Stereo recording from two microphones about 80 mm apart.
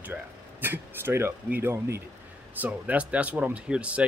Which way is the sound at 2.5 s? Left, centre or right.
Centre.